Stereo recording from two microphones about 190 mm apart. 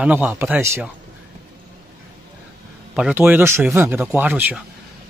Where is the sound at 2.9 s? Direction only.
5° right (ahead or behind).